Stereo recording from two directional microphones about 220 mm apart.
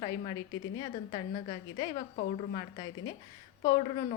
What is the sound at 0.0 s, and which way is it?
A woman's voice, 20° left (ahead or behind).